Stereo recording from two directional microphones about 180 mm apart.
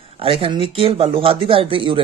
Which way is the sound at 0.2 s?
30° right (ahead or behind).